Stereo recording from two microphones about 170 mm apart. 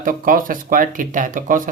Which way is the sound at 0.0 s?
55° right (ahead or behind).